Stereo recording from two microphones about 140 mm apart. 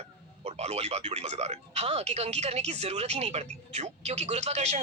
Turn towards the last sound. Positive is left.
turn(degrees=-50)  # may be behind; listen again after turning